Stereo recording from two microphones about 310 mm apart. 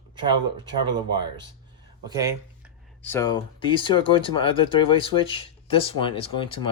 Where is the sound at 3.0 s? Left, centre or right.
Centre.